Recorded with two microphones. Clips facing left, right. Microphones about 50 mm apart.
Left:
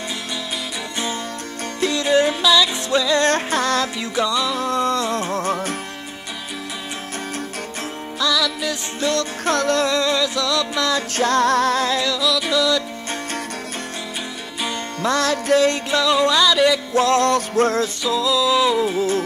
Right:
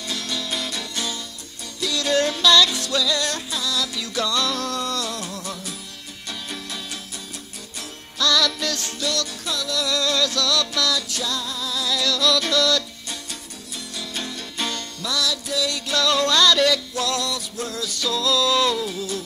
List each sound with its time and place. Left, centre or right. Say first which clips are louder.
1.8 s music: left 5 dB; left
2.0 s music: left 2 dB; centre
2.7 s music: left 5 dB; left
4.0 s music: left 3 dB; left
8.2 s music: even; centre
9.0 s music: left 6 dB; left
9.4 s music: left 9 dB; left
9.8 s music: left 3 dB; left
12.0 s music: left 1 dB; left
15.0 s music: left 8 dB; left
15.9 s music: left 3 dB; centre
16.9 s music: left 9 dB; left
18.0 s music: left 1 dB; centre
18.8 s music: left 8 dB; left